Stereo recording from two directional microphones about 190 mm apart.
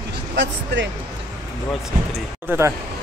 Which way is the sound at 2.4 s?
10° right (ahead or behind).